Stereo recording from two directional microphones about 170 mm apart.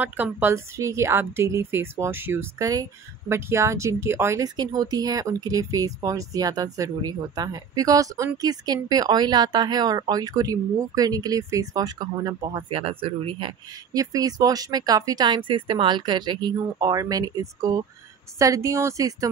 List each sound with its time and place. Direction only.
0.0 s speech: 10° right (ahead or behind)